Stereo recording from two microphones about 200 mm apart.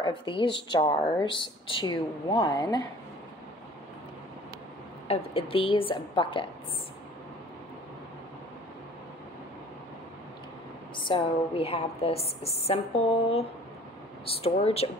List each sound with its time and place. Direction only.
0.0 s a woman's voice: 25° left (ahead or behind)
5.0 s a woman's voice: 30° left (ahead or behind)
11.0 s a woman's voice: 25° left (ahead or behind)
14.2 s a woman's voice: 30° left (ahead or behind)